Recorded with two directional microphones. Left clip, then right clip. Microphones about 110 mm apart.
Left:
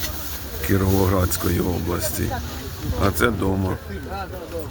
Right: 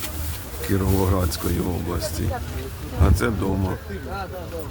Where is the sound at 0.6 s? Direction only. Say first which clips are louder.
Left 3 dB; centre (ahead or behind).